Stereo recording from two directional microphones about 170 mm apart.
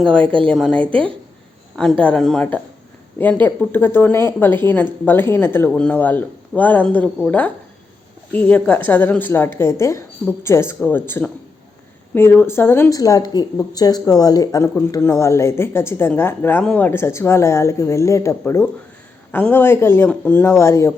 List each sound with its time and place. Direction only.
0.0 s speech: 5° left (ahead or behind)